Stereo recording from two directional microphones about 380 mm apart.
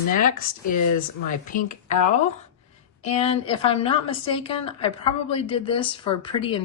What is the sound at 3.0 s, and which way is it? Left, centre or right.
A woman's voice, centre.